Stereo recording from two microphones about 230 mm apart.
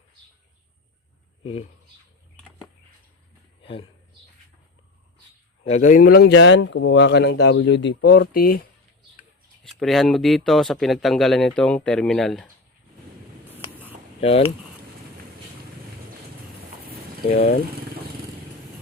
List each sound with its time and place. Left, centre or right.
3.6 s speech: left
5.6 s speech: left
9.6 s speech: centre
14.2 s speech: left
17.3 s speech: left